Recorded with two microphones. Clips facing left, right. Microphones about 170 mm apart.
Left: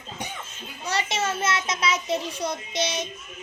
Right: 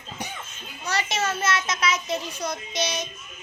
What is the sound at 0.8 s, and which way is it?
A child's voice, 25° left (ahead or behind).